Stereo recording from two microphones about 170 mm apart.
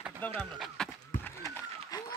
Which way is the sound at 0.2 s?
10° left (ahead or behind).